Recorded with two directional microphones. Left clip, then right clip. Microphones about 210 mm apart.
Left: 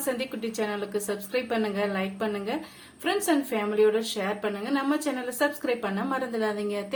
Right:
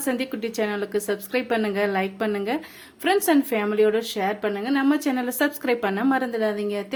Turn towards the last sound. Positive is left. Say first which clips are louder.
# right 3 dB
turn(degrees=-30)  # may be behind; listen again after turning